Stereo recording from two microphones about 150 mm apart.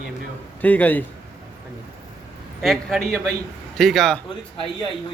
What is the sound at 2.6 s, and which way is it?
A man's voice, centre (ahead or behind).